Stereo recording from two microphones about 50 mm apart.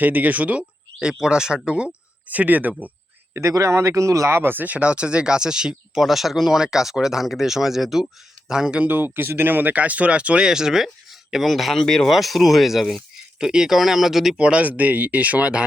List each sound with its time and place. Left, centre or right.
0.0 s speech: right
1.0 s speech: centre; by 2.9 s right
3.4 s speech: right
4.5 s speech: right; by 8.7 s centre
8.9 s speech: right
10.4 s speech: centre
13.4 s speech: centre
13.7 s speech: centre
14.3 s speech: right